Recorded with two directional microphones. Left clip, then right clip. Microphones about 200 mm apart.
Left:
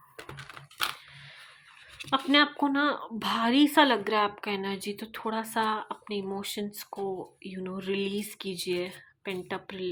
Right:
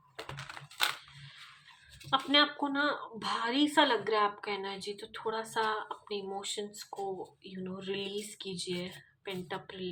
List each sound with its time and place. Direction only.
2.0 s a woman's voice: 40° left (ahead or behind)